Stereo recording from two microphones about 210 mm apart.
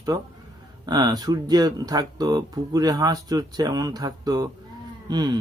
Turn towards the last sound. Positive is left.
turn(degrees=-20)  # may be behind; listen again after turning